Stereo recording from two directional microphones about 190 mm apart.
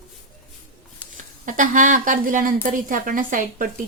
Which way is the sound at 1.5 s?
45° right (ahead or behind).